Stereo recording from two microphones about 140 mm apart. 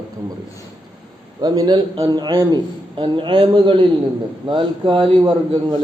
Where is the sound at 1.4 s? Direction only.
30° right (ahead or behind).